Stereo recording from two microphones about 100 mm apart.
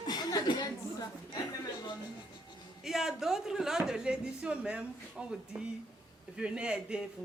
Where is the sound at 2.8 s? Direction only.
5° right (ahead or behind).